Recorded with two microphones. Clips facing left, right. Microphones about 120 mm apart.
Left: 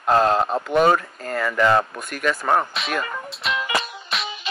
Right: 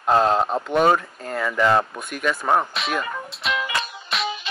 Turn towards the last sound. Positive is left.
turn(degrees=0)  # may be behind; listen again after turning